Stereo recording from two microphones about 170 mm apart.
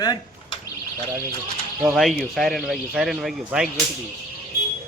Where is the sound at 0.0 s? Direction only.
25° left (ahead or behind).